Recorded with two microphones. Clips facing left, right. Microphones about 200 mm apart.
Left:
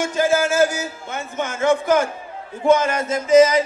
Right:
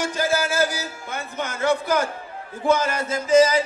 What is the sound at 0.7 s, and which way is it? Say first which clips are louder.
Speech: left 3 dB; 35° right (ahead or behind).